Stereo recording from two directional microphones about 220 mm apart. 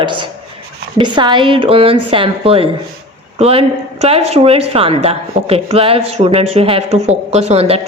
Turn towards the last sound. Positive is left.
turn(degrees=-25)  # may be behind; listen again after turning